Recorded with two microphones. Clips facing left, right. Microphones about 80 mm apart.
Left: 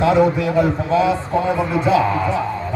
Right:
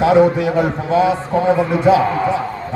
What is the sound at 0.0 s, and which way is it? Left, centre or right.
A man's voice, centre.